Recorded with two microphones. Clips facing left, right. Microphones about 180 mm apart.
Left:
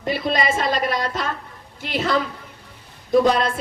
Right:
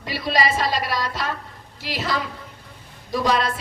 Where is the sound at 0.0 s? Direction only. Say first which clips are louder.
Left 1 dB; 50° left (ahead or behind).